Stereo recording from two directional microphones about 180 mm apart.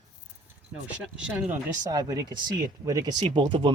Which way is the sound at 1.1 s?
5° right (ahead or behind).